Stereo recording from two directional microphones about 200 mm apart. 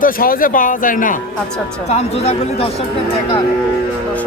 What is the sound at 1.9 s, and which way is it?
Speech, 30° left (ahead or behind).